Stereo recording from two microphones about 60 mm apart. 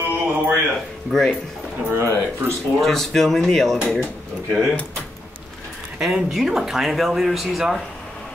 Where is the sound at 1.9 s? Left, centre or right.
Right.